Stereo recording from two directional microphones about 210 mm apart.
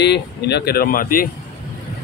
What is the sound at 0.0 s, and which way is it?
Speech, 50° left (ahead or behind).